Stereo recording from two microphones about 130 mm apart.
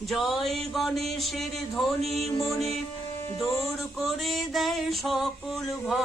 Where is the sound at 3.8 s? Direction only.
Centre (ahead or behind).